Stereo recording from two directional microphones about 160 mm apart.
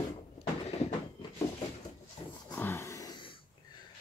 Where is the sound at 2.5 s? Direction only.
15° left (ahead or behind).